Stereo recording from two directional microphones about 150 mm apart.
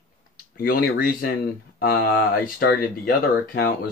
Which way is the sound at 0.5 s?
80° left.